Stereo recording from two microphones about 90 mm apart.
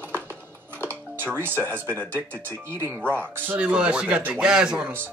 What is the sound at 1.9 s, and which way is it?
Speech, 15° left (ahead or behind).